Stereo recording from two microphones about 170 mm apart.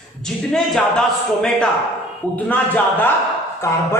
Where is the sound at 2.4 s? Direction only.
10° left (ahead or behind).